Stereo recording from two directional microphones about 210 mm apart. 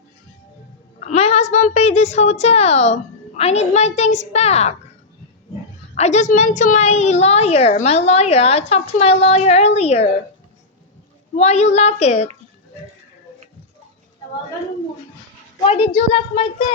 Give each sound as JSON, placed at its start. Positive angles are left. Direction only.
{"t": 0.9, "sound": "a woman's voice", "side_deg": 30}
{"t": 5.9, "sound": "a woman's voice", "side_deg": 35}
{"t": 11.3, "sound": "a woman's voice", "side_deg": 30}
{"t": 15.6, "sound": "a woman's voice", "side_deg": 25}